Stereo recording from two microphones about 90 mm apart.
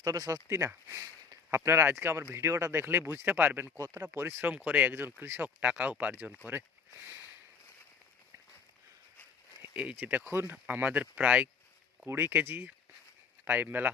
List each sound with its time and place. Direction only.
0.0 s speech: 40° right (ahead or behind); by 3.7 s 20° right (ahead or behind)
3.8 s speech: 35° right (ahead or behind)
4.5 s speech: 15° right (ahead or behind)
9.7 s speech: 15° right (ahead or behind)